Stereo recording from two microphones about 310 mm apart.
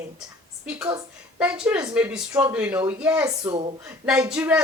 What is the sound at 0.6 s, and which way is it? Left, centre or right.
A woman's voice, centre.